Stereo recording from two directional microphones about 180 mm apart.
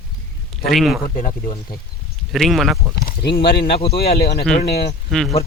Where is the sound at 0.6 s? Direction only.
Centre (ahead or behind).